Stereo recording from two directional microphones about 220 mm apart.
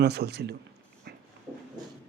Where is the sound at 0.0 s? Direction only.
45° right (ahead or behind).